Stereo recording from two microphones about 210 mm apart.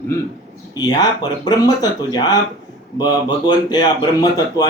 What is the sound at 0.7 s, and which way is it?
Speech, 20° left (ahead or behind).